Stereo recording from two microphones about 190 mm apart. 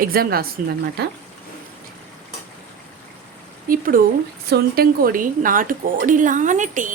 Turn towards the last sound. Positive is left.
turn(degrees=-45)  # may be behind; listen again after turning